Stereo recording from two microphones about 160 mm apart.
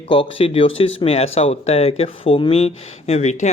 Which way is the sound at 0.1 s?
35° left (ahead or behind).